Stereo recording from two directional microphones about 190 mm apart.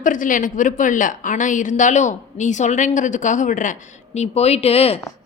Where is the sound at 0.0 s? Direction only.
45° left (ahead or behind).